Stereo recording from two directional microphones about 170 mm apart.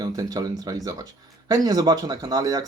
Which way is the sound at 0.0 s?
20° right (ahead or behind).